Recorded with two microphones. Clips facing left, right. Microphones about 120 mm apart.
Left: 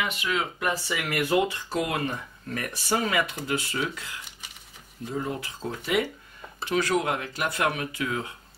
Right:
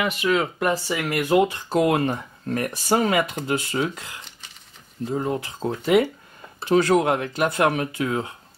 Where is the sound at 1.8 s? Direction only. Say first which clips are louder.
Right 8 dB; 40° right (ahead or behind).